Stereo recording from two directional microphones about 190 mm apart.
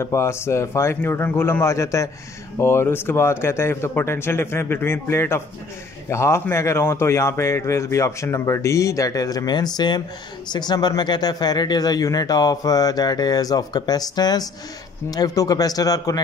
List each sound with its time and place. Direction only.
0.0 s a man's voice: 15° left (ahead or behind)